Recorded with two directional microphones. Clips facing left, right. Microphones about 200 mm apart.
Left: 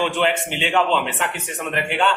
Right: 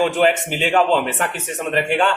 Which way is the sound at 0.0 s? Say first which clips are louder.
Right 4 dB; 45° right (ahead or behind).